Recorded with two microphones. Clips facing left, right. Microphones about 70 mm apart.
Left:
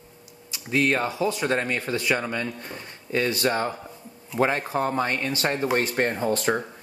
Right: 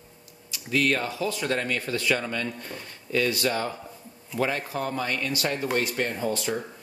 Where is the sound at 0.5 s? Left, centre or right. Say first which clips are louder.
Left 2 dB; left.